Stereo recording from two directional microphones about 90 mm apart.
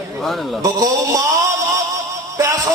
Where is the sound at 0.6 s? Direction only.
40° right (ahead or behind).